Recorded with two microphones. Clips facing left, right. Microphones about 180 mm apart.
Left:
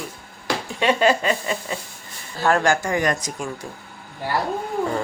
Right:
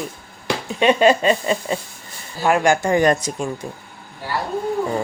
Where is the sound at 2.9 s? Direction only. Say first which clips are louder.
Right 6 dB; 30° right (ahead or behind).